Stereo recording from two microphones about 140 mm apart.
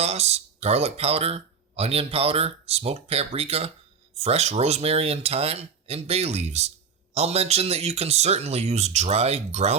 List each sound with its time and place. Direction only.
0.0 s speech: 50° right (ahead or behind)